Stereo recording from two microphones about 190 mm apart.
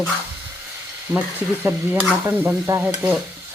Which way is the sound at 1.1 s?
15° right (ahead or behind).